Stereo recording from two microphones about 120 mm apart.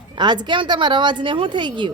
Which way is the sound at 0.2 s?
40° right (ahead or behind).